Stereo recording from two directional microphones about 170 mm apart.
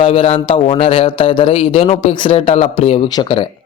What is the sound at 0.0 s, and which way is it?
Speech, 35° left (ahead or behind).